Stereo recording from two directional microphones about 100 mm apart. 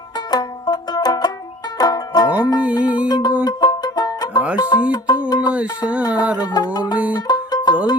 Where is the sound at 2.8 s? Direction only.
15° right (ahead or behind).